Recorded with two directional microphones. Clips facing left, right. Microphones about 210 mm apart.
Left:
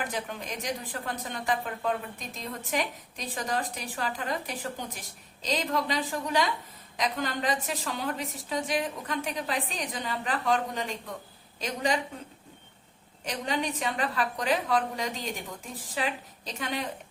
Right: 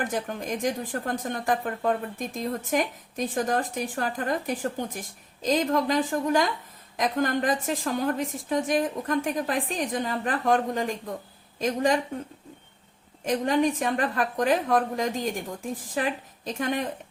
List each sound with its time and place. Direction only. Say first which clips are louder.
0.0 s a woman's voice: right 5 dB; 50° right (ahead or behind)
13.2 s a woman's voice: right 8 dB; 50° right (ahead or behind)